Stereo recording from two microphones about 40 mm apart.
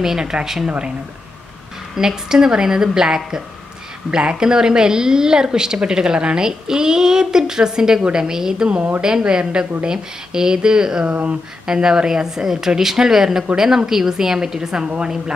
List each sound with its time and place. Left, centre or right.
0.0 s a woman's voice: centre
2.0 s a woman's voice: centre
11.1 s speech: right
11.6 s a woman's voice: centre